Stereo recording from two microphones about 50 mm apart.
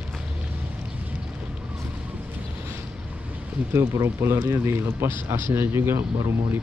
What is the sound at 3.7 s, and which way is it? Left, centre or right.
Speech, right.